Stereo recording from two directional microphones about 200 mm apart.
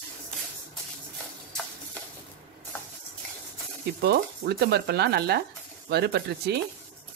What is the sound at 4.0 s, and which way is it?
Speech, 55° right (ahead or behind).